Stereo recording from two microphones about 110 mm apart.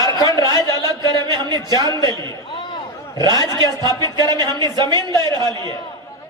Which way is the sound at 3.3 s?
35° left (ahead or behind).